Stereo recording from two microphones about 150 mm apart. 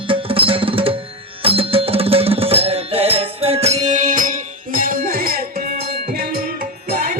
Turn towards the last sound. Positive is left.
turn(degrees=-70)  # may be behind; listen again after turning